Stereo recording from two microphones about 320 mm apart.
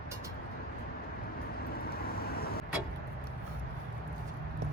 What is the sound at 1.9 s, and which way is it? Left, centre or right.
Vehicle, left.